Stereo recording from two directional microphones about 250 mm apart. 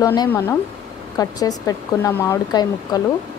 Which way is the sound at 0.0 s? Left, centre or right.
Centre.